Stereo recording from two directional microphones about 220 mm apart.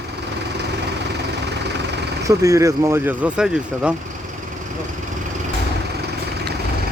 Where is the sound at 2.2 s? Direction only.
15° right (ahead or behind).